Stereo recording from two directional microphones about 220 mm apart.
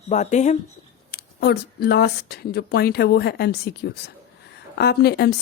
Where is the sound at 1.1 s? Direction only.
45° left (ahead or behind).